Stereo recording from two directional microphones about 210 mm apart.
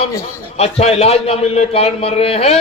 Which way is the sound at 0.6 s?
30° left (ahead or behind).